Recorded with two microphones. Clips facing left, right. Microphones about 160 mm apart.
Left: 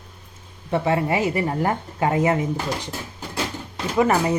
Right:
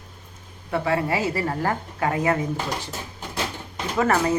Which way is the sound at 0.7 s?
25° left (ahead or behind).